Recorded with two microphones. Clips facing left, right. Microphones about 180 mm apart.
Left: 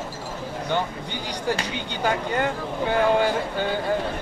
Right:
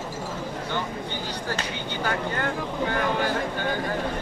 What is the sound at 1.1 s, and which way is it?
Speech, 15° left (ahead or behind).